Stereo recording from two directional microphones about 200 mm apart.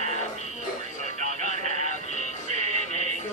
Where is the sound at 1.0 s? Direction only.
35° right (ahead or behind).